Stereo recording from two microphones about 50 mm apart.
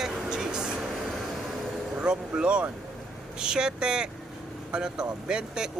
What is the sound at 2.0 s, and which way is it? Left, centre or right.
Speech, centre.